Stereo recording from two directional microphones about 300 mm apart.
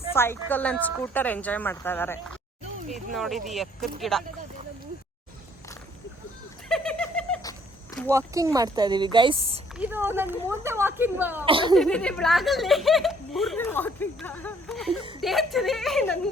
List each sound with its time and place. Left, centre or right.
0.1 s a woman's voice: centre
6.7 s a sound: centre
8.1 s speech: centre
9.7 s speech: centre
11.4 s speech: centre
11.7 s speech: centre
14.8 s a sound: centre
15.2 s speech: centre